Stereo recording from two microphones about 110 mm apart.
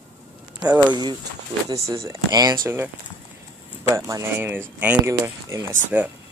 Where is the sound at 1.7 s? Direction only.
30° right (ahead or behind).